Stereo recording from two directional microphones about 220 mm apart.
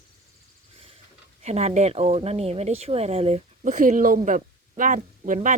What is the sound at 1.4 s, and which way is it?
Speech, 30° right (ahead or behind).